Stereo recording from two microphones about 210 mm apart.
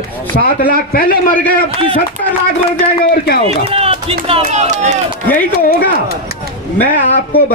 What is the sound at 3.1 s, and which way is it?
Speech, 45° left (ahead or behind).